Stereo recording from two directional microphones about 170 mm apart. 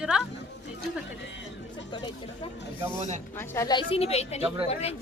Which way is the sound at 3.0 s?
45° right (ahead or behind).